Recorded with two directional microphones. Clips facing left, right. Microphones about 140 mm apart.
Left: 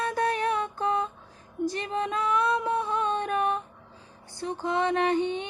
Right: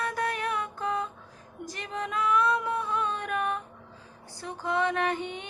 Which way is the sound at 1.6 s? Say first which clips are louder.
Left 7 dB; 30° left (ahead or behind).